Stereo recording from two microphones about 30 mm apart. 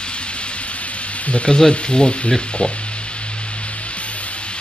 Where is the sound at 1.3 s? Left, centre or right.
Left.